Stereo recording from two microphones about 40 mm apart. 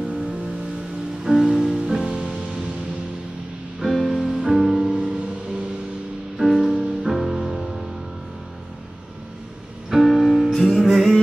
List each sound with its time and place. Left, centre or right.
0.0 s music: centre
3.8 s music: centre
6.3 s music: centre
6.8 s music: centre
7.1 s music: centre
9.8 s music: centre
10.5 s music: centre